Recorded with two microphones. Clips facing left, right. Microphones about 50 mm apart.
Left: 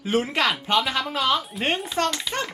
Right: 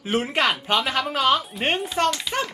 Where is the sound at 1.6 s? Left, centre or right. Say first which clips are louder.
Right 2 dB; right.